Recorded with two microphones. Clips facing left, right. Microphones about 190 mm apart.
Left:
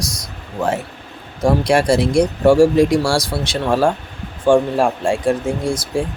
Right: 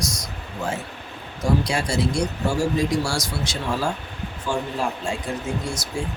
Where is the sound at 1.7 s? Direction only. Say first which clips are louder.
Left 9 dB; 90° left.